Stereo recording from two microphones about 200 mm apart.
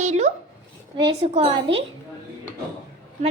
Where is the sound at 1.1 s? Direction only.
30° right (ahead or behind).